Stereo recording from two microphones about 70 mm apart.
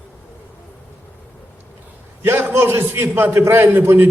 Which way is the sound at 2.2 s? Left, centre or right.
Right.